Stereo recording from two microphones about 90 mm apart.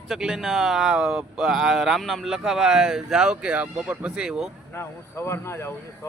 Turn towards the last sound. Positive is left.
turn(degrees=30)  # may be behind; listen again after turning